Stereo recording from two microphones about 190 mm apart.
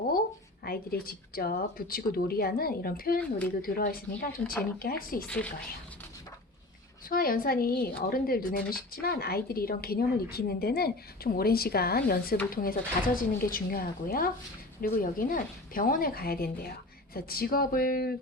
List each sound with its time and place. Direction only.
0.6 s speech: 50° left (ahead or behind)
5.3 s speech: 5° left (ahead or behind)
7.1 s speech: 50° left (ahead or behind)